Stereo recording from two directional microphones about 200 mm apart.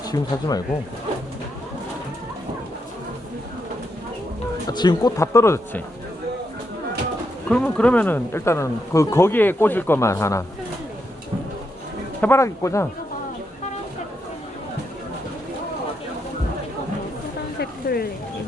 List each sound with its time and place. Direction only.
0.1 s speech: 20° left (ahead or behind)
4.7 s speech: 20° left (ahead or behind)
7.4 s speech: 5° left (ahead or behind)
12.2 s speech: 15° left (ahead or behind)
17.6 s a sound: 50° left (ahead or behind)